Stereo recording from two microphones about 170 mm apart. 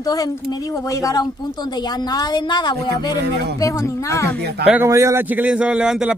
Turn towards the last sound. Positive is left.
turn(degrees=-5)  # may be behind; listen again after turning